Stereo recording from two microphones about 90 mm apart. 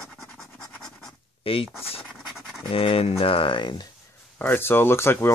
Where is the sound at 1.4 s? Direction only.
90° left.